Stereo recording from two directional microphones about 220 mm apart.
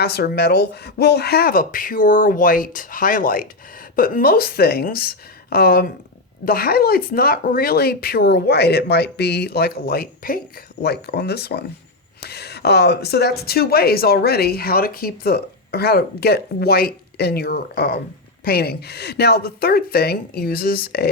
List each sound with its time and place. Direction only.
0.0 s speech: 45° left (ahead or behind)